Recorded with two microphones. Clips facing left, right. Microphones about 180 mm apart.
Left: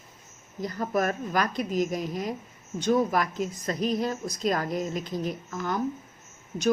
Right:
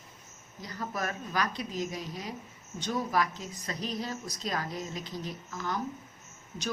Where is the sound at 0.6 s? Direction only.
50° left (ahead or behind).